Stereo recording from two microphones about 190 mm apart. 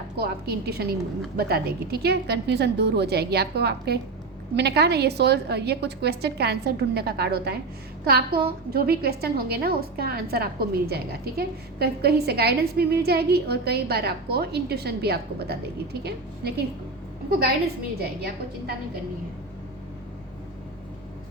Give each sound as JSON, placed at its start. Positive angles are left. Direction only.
{"t": 0.2, "sound": "a woman's voice", "side_deg": -55}
{"t": 18.0, "sound": "a woman's voice", "side_deg": -55}